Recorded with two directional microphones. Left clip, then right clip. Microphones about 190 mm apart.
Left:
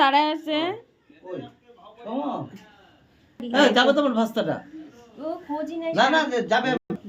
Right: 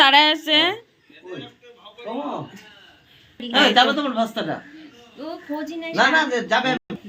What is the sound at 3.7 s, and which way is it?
Speech, 65° left (ahead or behind).